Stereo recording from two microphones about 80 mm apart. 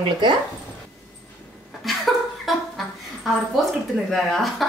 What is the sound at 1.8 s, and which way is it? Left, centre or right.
Chuckle, centre.